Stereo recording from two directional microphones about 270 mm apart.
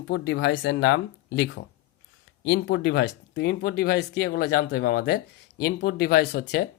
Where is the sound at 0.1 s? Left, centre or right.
Left.